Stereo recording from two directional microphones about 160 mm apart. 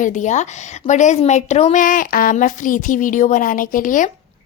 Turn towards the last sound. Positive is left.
turn(degrees=55)  # may be behind; listen again after turning